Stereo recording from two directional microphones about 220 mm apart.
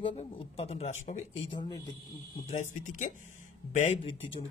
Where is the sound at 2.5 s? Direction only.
35° left (ahead or behind).